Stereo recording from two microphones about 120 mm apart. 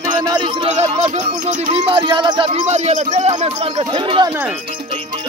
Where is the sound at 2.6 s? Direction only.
70° right (ahead or behind).